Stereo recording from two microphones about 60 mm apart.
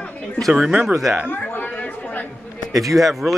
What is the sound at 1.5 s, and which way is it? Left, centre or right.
Chatter, left.